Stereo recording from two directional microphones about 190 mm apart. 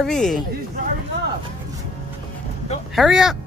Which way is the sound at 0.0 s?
Centre (ahead or behind).